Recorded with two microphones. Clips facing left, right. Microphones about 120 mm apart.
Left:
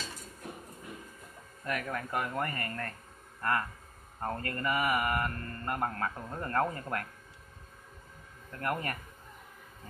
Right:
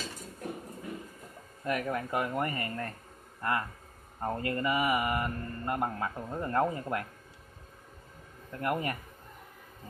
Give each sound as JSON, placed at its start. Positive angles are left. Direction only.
{"t": 1.6, "sound": "speech", "side_deg": -25}
{"t": 8.5, "sound": "speech", "side_deg": -15}